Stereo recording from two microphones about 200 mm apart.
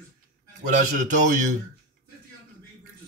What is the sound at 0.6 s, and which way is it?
Speech, 40° right (ahead or behind).